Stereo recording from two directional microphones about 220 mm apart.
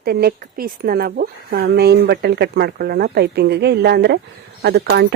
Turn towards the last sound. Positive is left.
turn(degrees=-50)  # may be behind; listen again after turning